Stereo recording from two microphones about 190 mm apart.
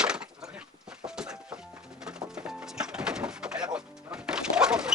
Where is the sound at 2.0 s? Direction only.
5° right (ahead or behind).